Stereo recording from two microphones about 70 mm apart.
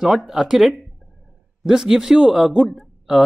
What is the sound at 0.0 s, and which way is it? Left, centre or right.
Speech, centre.